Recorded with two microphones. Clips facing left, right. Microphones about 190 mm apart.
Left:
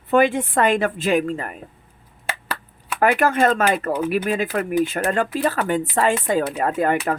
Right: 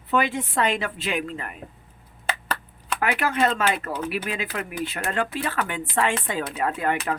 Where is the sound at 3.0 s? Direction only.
50° left (ahead or behind).